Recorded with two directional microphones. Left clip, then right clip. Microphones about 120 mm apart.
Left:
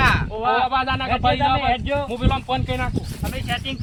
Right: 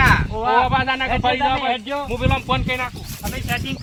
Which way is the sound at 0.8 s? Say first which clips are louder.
Right 2 dB; 65° left (ahead or behind).